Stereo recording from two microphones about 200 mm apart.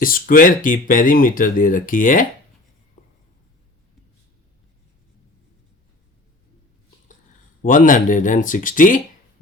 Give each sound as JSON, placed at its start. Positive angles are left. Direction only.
{"t": 0.0, "sound": "speech", "side_deg": 45}
{"t": 7.6, "sound": "speech", "side_deg": 40}